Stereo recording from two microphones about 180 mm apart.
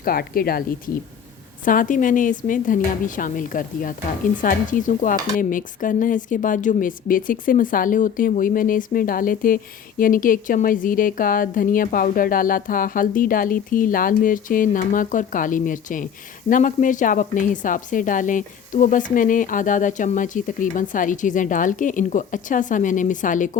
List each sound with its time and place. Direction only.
0.0 s a woman's voice: 55° left (ahead or behind)
1.6 s a woman's voice: 50° left (ahead or behind)